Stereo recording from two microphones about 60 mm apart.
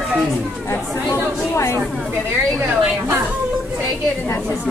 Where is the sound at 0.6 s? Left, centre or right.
Left.